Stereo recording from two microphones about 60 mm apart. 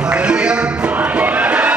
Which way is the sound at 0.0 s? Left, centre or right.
Centre.